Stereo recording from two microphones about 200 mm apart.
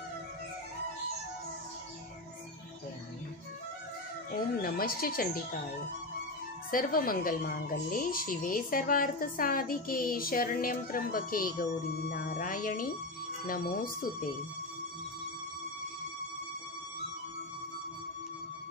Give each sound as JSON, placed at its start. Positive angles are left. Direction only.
{"t": 4.6, "sound": "speech", "side_deg": 45}
{"t": 6.7, "sound": "speech", "side_deg": 45}